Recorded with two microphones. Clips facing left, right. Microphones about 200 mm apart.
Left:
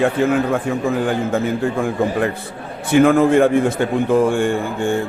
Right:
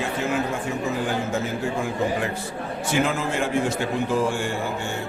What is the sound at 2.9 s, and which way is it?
A man's voice, 55° left (ahead or behind).